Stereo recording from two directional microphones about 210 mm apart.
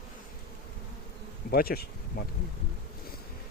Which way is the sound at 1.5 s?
45° left (ahead or behind).